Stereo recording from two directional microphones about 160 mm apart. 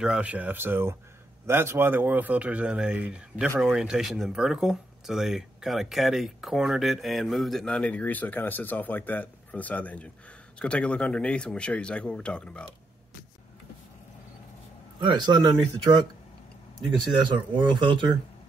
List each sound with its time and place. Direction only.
0.0 s speech: 5° right (ahead or behind)
15.0 s speech: 30° right (ahead or behind)
17.1 s speech: 30° right (ahead or behind)